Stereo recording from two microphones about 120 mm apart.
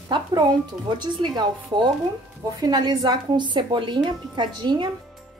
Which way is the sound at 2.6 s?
35° right (ahead or behind).